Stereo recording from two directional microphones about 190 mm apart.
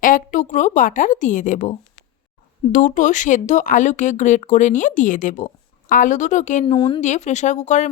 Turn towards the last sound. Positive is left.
turn(degrees=40)  # may be behind; listen again after turning